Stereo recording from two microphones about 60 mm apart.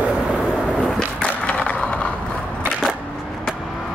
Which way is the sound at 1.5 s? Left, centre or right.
Centre.